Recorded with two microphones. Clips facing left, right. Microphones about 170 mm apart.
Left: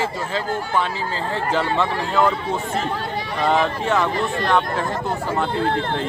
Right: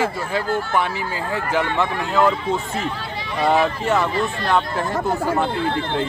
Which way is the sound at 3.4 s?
5° right (ahead or behind).